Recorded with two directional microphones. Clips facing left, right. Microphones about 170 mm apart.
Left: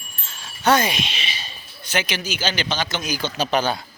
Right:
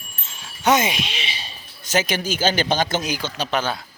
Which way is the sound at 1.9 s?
45° right (ahead or behind).